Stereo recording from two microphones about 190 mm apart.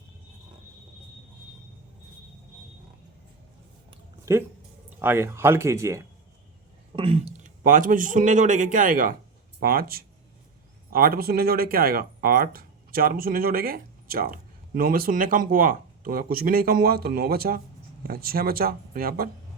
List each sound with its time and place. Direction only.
4.3 s speech: 15° right (ahead or behind)
6.9 s speech: 30° right (ahead or behind); by 19.3 s 50° right (ahead or behind)